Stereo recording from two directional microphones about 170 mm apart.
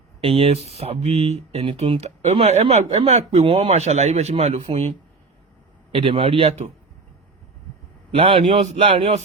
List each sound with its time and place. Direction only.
0.2 s speech: 35° right (ahead or behind)
5.9 s speech: 30° right (ahead or behind)
8.1 s speech: 35° right (ahead or behind)